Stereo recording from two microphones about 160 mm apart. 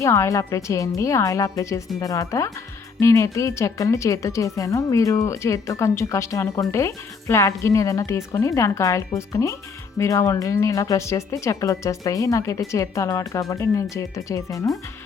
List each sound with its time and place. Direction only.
0.0 s a woman's voice: 20° left (ahead or behind)